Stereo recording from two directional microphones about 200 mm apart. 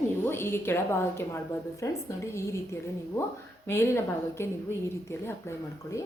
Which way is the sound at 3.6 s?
10° left (ahead or behind).